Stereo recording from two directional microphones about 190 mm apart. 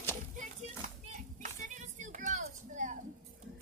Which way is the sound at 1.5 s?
40° right (ahead or behind).